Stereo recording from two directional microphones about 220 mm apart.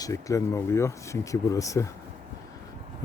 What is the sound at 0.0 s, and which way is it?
Speech, 15° left (ahead or behind).